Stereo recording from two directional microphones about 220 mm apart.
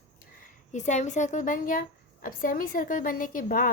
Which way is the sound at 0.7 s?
30° left (ahead or behind).